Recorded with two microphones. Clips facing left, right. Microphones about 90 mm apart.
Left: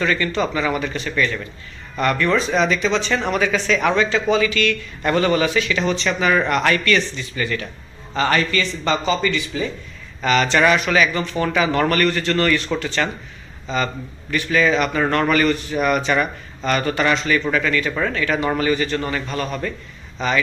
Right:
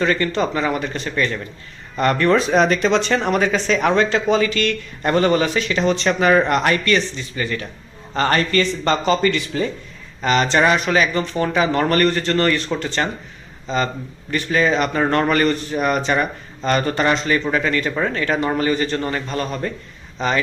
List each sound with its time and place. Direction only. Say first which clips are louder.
0.0 s a man's voice: right 1 dB; 40° right (ahead or behind)
3.2 s a man's voice: right 2 dB; 40° right (ahead or behind)
8.1 s speech: right 1 dB; 45° right (ahead or behind)
10.2 s a man's voice: even; 30° right (ahead or behind)